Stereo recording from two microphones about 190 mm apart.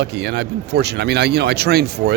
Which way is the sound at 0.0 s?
60° right (ahead or behind).